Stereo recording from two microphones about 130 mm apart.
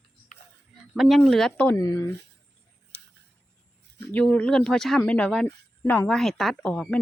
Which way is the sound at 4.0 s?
10° left (ahead or behind).